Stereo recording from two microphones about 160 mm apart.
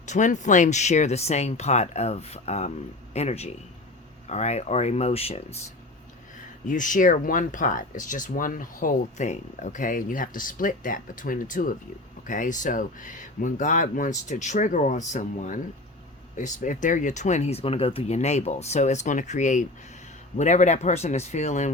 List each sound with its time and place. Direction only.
0.0 s speech: 50° left (ahead or behind)
6.7 s speech: 55° left (ahead or behind)